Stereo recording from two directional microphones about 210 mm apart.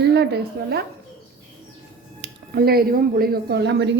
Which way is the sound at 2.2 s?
50° right (ahead or behind).